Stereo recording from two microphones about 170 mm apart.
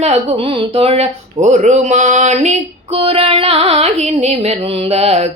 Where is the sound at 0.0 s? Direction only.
40° right (ahead or behind).